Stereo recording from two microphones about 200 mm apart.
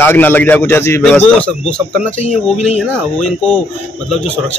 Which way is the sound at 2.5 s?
30° left (ahead or behind).